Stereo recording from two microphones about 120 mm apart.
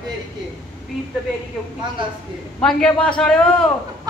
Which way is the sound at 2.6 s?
5° left (ahead or behind).